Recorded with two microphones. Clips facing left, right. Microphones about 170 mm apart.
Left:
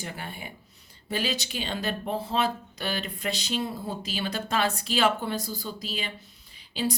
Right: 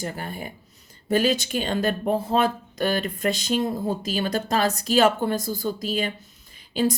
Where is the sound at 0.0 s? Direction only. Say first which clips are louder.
Right 6 dB; 40° right (ahead or behind).